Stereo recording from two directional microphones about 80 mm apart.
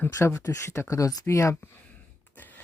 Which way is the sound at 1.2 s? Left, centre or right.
Left.